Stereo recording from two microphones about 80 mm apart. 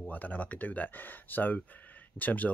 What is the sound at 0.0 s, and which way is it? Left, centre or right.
Speech, left.